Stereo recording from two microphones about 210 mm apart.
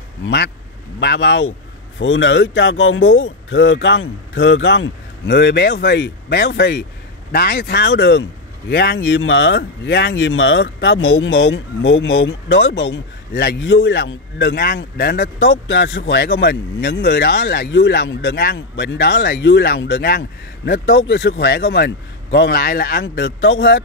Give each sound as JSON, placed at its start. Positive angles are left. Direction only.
{"t": 0.2, "sound": "speech", "side_deg": 55}